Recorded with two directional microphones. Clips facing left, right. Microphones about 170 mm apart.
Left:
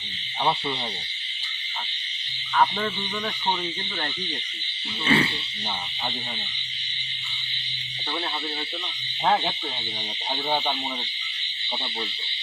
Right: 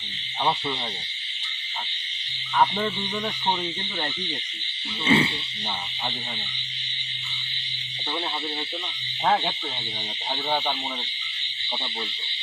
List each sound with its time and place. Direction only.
2.6 s speech: 10° right (ahead or behind)
5.0 s speech: 20° right (ahead or behind)